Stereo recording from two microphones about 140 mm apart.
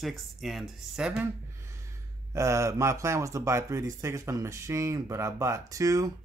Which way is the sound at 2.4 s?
20° right (ahead or behind).